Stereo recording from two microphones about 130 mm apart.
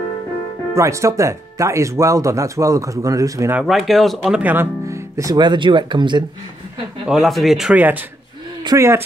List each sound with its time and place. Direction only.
0.7 s speech: 25° right (ahead or behind)
3.6 s speech: centre (ahead or behind); by 6.2 s 35° right (ahead or behind)
7.1 s speech: centre (ahead or behind)
8.6 s speech: 20° right (ahead or behind)